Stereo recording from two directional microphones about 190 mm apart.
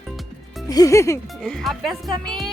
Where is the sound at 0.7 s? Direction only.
20° left (ahead or behind).